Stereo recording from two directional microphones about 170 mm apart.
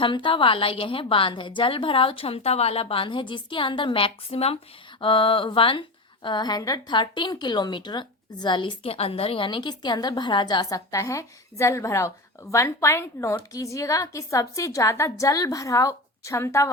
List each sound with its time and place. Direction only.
0.0 s a woman's voice: 30° left (ahead or behind)